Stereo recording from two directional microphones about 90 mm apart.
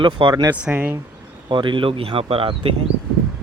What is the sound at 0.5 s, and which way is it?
Speech, 15° right (ahead or behind).